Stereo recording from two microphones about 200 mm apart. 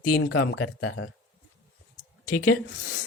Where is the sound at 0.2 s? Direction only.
70° left (ahead or behind).